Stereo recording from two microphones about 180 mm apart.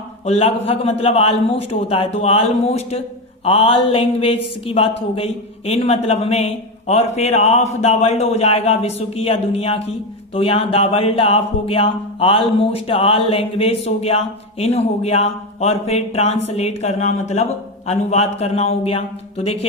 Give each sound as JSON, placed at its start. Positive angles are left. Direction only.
{"t": 0.3, "sound": "speech", "side_deg": 35}